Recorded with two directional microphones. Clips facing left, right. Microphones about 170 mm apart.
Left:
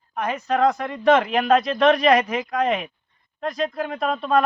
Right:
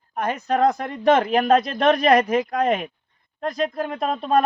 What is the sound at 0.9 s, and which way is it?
Speech, 40° right (ahead or behind).